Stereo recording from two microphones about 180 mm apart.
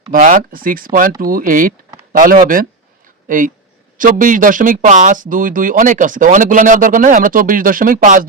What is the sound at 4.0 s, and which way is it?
Speech, 45° right (ahead or behind).